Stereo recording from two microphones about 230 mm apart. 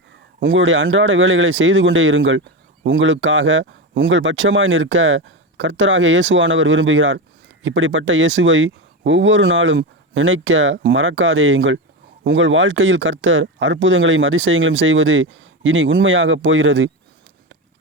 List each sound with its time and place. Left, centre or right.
0.5 s speech: right